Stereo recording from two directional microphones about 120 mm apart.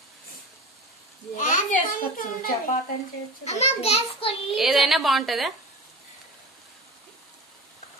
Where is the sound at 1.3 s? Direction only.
90° left.